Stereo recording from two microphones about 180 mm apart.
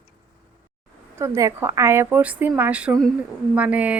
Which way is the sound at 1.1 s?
15° right (ahead or behind).